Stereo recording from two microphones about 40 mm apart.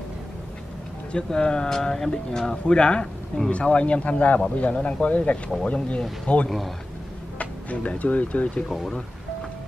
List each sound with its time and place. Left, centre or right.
1.1 s speech: left
8.6 s speech: centre